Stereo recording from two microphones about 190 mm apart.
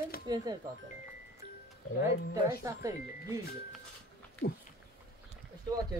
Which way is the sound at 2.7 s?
15° right (ahead or behind).